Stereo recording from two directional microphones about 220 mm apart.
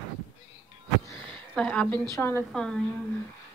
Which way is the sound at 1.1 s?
5° left (ahead or behind).